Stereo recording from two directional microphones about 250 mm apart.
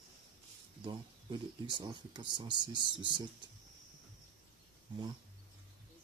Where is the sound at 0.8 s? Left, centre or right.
Centre.